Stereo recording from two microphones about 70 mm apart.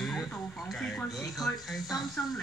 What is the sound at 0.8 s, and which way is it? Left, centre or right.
Speech, centre.